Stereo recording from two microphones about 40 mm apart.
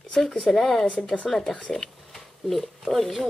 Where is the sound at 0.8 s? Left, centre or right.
Left.